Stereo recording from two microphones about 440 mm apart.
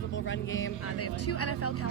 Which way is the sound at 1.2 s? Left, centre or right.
Left.